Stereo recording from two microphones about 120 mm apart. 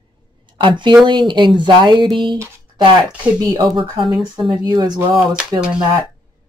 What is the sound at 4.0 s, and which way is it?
Speech, centre (ahead or behind).